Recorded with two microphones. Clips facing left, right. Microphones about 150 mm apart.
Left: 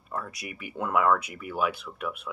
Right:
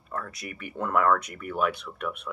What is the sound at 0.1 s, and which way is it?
Speech, 10° left (ahead or behind).